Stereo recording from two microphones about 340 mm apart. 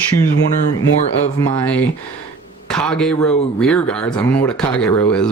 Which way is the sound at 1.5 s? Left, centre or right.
Centre.